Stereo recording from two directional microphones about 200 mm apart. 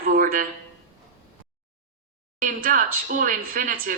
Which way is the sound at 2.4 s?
45° right (ahead or behind).